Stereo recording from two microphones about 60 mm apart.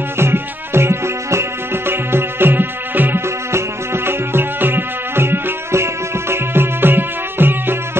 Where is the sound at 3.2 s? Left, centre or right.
Right.